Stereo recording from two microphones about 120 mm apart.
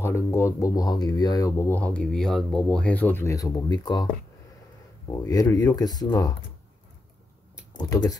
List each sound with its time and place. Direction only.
0.0 s speech: 20° left (ahead or behind)
1.7 s speech: 15° left (ahead or behind); by 4.1 s 35° left (ahead or behind)
5.1 s speech: 30° left (ahead or behind)
7.7 s speech: 35° left (ahead or behind)